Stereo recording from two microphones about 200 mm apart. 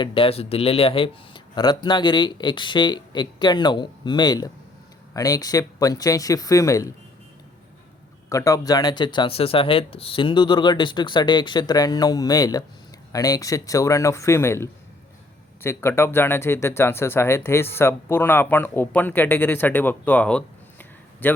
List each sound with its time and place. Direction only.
0.0 s speech: 25° left (ahead or behind)
8.3 s speech: 15° left (ahead or behind)